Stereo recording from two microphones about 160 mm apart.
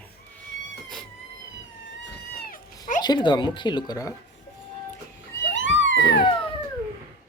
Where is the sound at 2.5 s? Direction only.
55° left (ahead or behind).